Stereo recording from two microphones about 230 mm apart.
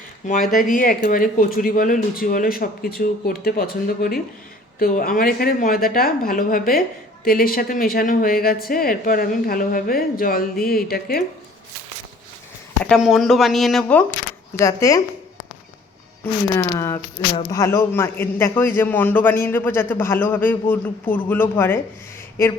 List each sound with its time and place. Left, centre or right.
0.5 s speech: left
12.8 s speech: centre
16.2 s speech: centre